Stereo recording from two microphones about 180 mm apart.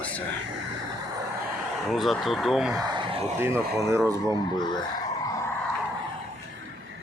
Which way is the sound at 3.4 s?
15° right (ahead or behind).